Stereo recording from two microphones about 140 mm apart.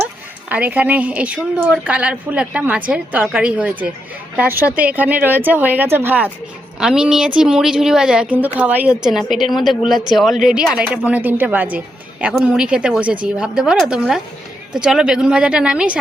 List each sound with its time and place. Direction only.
0.4 s a woman's voice: 10° right (ahead or behind)